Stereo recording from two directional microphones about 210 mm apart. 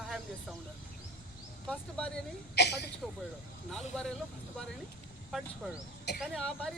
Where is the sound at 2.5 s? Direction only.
50° left (ahead or behind).